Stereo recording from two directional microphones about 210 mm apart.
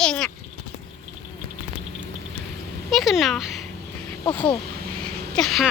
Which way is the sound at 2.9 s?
Centre (ahead or behind).